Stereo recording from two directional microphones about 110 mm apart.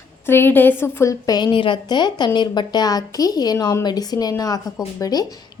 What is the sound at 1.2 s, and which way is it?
A woman's voice, 40° left (ahead or behind).